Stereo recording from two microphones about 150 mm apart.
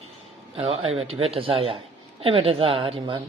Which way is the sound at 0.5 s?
40° right (ahead or behind).